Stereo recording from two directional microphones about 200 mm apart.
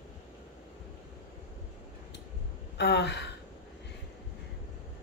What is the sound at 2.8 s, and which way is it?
Speech, 60° left (ahead or behind).